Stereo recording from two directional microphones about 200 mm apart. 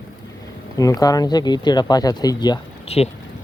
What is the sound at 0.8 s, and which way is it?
Speech, 15° left (ahead or behind).